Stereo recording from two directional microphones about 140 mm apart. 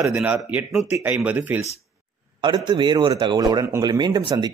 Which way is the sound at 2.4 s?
30° right (ahead or behind).